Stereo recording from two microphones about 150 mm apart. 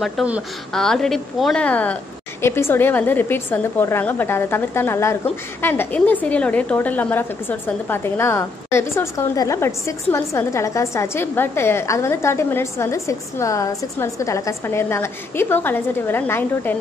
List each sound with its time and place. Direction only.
0.0 s a woman's voice: centre (ahead or behind); by 16.7 s 15° left (ahead or behind)